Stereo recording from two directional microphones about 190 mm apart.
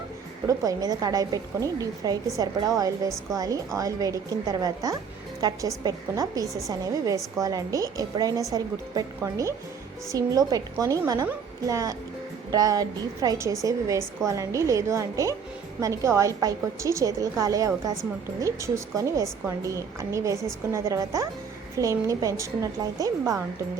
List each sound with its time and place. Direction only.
0.4 s a woman's voice: 20° right (ahead or behind)